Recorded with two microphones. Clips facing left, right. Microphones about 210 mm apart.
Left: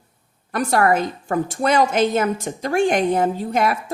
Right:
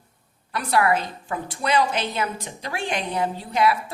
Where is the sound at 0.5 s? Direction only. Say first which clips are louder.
Left 4 dB; 45° left (ahead or behind).